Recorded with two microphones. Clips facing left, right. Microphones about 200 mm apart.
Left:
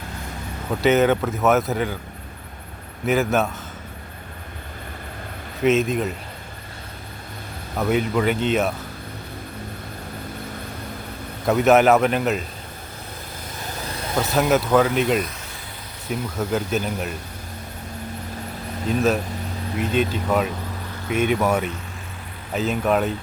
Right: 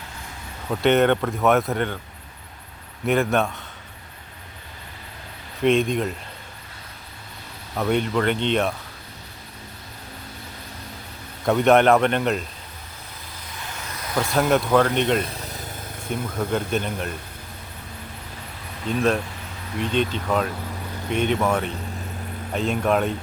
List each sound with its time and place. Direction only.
0.8 s speech: centre (ahead or behind)
3.1 s speech: centre (ahead or behind)
5.6 s speech: 5° left (ahead or behind)
7.8 s speech: 5° left (ahead or behind)
11.4 s speech: 5° left (ahead or behind)
13.7 s vehicle: 35° left (ahead or behind)
14.3 s speech: 5° left (ahead or behind)
18.9 s speech: 5° left (ahead or behind)